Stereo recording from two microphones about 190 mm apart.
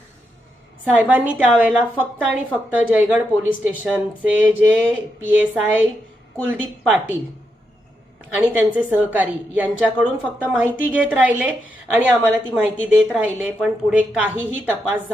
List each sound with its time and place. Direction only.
0.9 s speech: 10° right (ahead or behind)
8.4 s speech: 10° right (ahead or behind)